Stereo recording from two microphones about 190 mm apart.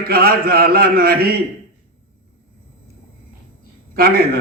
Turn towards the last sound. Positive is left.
turn(degrees=-50)  # may be behind; listen again after turning